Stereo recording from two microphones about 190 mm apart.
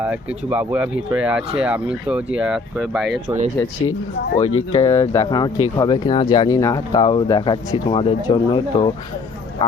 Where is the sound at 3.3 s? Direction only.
10° right (ahead or behind).